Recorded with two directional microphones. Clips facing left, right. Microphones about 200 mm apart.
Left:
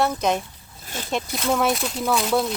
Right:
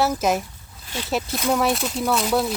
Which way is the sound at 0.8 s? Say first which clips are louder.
Right 2 dB; 45° left (ahead or behind).